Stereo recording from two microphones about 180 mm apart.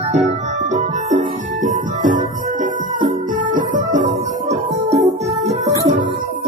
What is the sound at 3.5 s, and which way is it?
Music, 45° right (ahead or behind).